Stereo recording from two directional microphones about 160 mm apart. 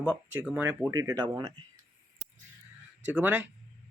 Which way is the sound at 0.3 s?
10° right (ahead or behind).